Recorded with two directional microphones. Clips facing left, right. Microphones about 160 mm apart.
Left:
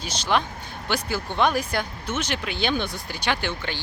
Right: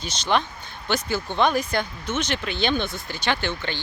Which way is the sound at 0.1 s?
5° left (ahead or behind).